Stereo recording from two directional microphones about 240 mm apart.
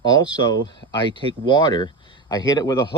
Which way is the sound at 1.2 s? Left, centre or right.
Centre.